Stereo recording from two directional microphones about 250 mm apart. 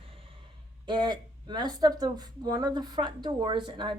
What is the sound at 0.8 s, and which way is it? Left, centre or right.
Speech, centre.